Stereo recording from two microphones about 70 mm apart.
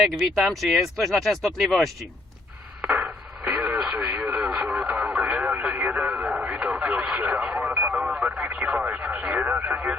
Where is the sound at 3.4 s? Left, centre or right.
Centre.